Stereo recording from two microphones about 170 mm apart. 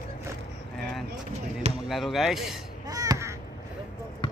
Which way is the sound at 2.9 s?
20° right (ahead or behind).